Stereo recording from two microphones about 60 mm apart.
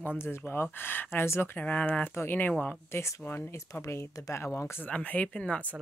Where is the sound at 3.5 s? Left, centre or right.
Left.